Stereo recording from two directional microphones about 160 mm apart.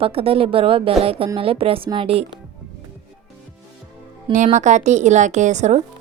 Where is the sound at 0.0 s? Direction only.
35° right (ahead or behind).